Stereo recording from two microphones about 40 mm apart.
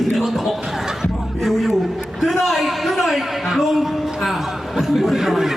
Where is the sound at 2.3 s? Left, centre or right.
Centre.